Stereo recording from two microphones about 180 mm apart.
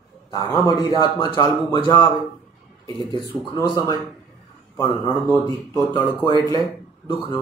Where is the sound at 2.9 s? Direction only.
25° right (ahead or behind).